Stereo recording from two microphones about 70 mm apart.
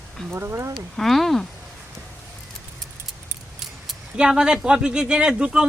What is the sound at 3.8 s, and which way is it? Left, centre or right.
A man's voice, centre.